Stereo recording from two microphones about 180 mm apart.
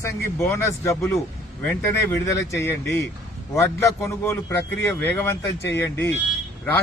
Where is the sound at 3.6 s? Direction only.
15° left (ahead or behind).